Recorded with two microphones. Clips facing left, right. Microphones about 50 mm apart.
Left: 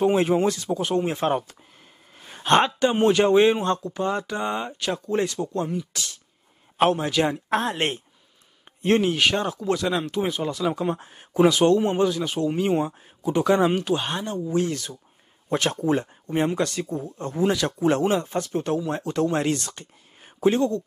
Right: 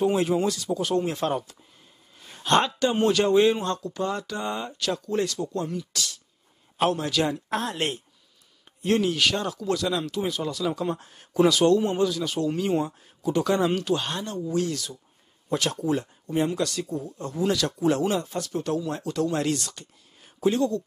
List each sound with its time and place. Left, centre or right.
0.0 s speech: left